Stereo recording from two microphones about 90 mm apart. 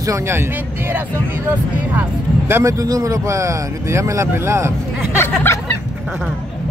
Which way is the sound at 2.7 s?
40° right (ahead or behind).